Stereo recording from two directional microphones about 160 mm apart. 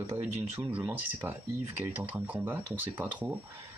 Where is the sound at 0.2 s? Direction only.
10° right (ahead or behind).